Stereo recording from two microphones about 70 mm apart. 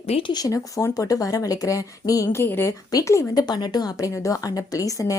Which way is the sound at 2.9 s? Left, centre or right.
Left.